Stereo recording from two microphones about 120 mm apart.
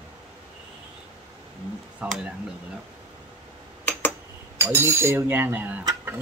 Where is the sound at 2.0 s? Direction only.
10° right (ahead or behind).